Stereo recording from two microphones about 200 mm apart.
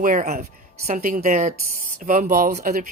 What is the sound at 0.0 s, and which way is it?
A woman's voice, 40° right (ahead or behind).